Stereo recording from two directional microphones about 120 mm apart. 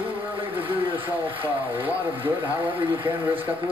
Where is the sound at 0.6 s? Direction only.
45° right (ahead or behind).